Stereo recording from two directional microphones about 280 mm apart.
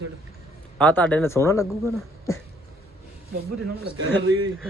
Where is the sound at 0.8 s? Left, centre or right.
Centre.